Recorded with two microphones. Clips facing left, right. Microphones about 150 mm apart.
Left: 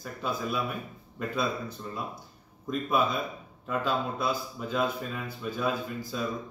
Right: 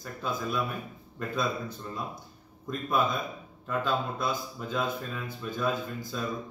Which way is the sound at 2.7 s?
5° left (ahead or behind).